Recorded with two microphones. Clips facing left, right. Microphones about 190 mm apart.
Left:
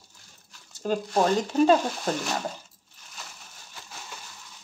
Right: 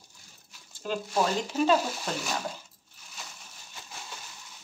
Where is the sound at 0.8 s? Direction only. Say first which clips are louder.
Left 5 dB; 45° left (ahead or behind).